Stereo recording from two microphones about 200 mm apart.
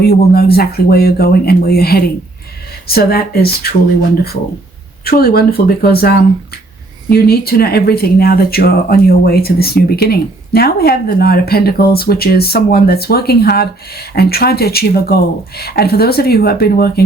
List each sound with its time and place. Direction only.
0.0 s speech: 50° left (ahead or behind)
5.0 s speech: 50° left (ahead or behind)